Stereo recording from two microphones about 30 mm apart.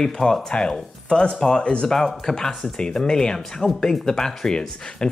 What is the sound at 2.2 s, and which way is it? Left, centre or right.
Speech, left.